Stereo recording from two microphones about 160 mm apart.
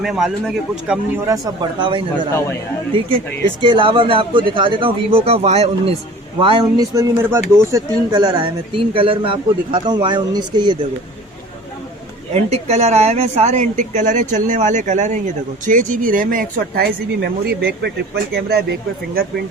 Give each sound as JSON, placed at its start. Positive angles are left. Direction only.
{"t": 0.0, "sound": "a man's voice", "side_deg": -5}
{"t": 1.1, "sound": "speech", "side_deg": -15}
{"t": 1.5, "sound": "speech", "side_deg": -30}
{"t": 3.4, "sound": "speech", "side_deg": -30}
{"t": 6.4, "sound": "speech", "side_deg": -30}
{"t": 12.3, "sound": "speech", "side_deg": -40}